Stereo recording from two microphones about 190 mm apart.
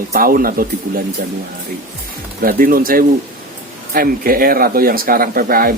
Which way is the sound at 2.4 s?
50° right (ahead or behind).